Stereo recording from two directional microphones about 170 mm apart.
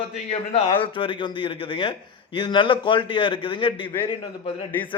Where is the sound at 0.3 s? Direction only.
35° left (ahead or behind).